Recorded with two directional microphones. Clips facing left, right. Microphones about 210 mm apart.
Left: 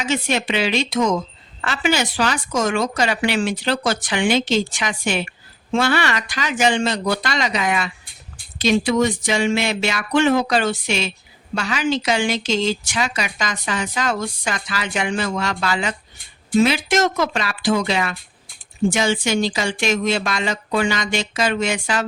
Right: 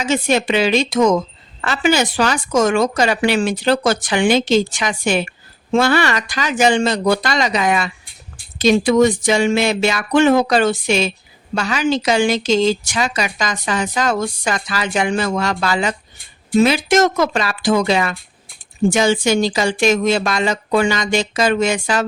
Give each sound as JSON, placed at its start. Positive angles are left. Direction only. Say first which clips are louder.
{"t": 0.0, "sound": "a woman's voice", "louder": "right 4 dB", "side_deg": -40}